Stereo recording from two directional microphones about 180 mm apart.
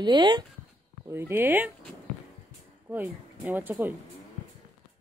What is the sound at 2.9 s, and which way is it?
A man's voice, 10° right (ahead or behind).